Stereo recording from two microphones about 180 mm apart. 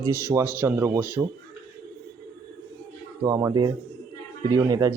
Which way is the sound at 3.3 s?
20° right (ahead or behind).